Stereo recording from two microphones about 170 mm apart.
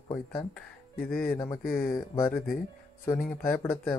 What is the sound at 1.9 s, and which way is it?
Speech, 15° left (ahead or behind).